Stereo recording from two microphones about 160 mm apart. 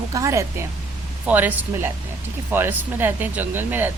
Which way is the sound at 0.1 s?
20° right (ahead or behind).